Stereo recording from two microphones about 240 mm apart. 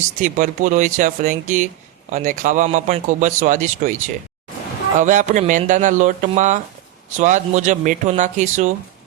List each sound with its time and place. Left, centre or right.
0.2 s a man's voice: right
4.9 s a man's voice: right